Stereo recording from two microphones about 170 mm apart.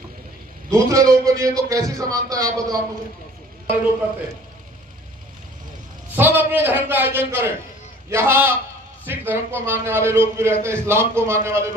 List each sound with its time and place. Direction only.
0.7 s speech: 20° right (ahead or behind)
6.1 s a man's voice: 10° right (ahead or behind)